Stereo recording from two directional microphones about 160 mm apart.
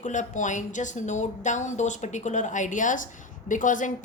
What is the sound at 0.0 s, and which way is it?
A woman's voice, 50° left (ahead or behind).